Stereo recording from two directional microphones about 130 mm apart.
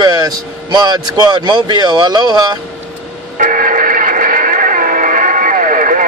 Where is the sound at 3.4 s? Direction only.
90° right.